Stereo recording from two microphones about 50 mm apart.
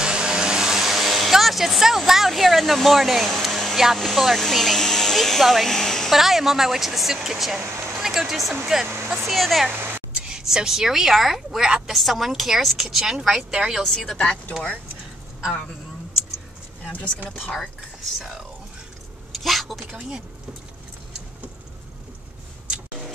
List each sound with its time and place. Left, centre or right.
0.0 s vehicle: centre
3.7 s speech: centre
6.1 s a woman's voice: centre
8.8 s speech: right
9.1 s speech: centre
9.7 s a sound: right
10.2 s a woman's voice: centre
11.9 s a woman's voice: centre
13.8 s speech: centre
14.1 s speech: centre
17.5 s speech: centre
19.3 s a woman's voice: centre
19.9 s a woman's voice: centre